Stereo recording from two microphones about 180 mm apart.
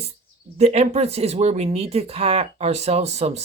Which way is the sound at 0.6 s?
35° right (ahead or behind).